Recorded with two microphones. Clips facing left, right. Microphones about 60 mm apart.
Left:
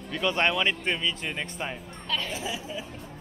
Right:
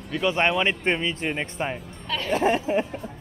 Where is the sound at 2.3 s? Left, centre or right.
Right.